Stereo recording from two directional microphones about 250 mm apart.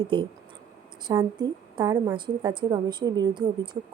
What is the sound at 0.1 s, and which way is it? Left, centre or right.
A woman's voice, right.